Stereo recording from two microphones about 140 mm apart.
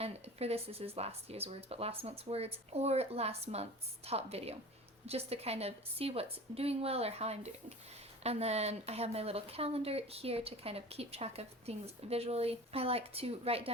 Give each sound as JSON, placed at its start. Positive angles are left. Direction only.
{"t": 0.0, "sound": "speech", "side_deg": -45}